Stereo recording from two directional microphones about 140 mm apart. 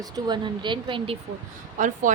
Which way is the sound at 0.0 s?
30° right (ahead or behind).